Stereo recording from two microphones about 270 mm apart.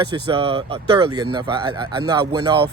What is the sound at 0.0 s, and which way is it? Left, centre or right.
Speech, centre.